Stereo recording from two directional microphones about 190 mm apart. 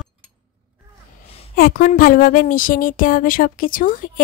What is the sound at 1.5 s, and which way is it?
Speech, 50° left (ahead or behind).